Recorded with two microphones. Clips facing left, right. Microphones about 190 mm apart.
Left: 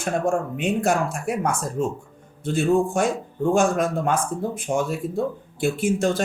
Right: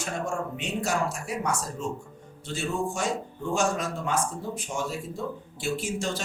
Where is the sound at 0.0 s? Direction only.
55° left (ahead or behind).